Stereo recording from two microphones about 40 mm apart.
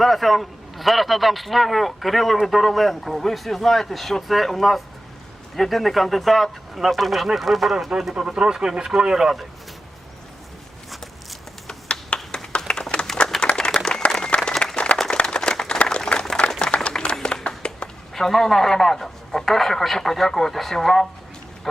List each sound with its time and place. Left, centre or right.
0.0 s a man's voice: centre
7.9 s speech: centre
11.7 s finger snapping: left
12.5 s a sound: centre
13.2 s clapping: left
13.7 s applause: left
15.8 s a sound: left
18.1 s a man's voice: centre